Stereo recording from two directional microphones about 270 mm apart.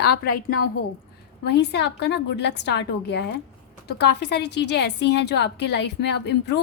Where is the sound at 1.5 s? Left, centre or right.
Left.